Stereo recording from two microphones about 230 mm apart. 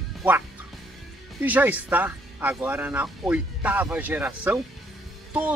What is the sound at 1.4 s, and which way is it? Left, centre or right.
Speech, centre.